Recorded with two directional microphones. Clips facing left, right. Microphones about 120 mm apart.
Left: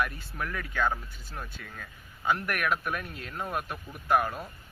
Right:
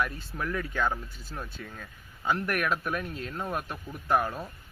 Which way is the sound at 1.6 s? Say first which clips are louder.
Right 4 dB; 20° right (ahead or behind).